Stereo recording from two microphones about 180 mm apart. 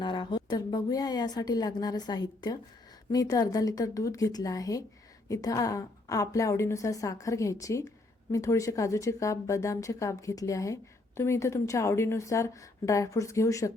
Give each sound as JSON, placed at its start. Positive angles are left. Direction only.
{"t": 0.0, "sound": "a woman's voice", "side_deg": 25}